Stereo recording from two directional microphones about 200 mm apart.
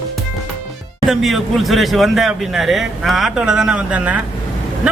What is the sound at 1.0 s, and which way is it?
A man's voice, centre (ahead or behind).